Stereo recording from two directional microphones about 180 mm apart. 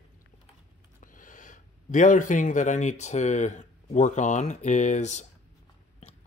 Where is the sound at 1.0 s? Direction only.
50° left (ahead or behind).